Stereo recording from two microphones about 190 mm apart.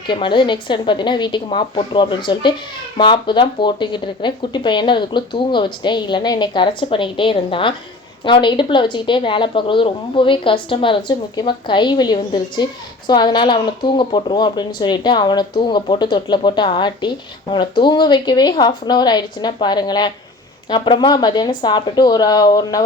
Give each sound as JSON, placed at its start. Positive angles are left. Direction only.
{"t": 0.1, "sound": "speech", "side_deg": 25}